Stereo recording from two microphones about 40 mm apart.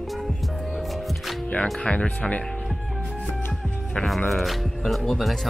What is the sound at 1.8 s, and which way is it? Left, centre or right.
Speech, left.